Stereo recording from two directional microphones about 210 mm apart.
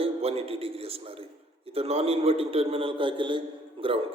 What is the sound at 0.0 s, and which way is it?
A man's voice, 30° right (ahead or behind).